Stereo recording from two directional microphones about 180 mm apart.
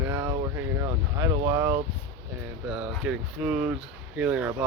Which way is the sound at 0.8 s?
15° right (ahead or behind).